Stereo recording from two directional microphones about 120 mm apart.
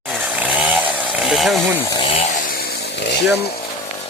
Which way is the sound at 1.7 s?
30° left (ahead or behind).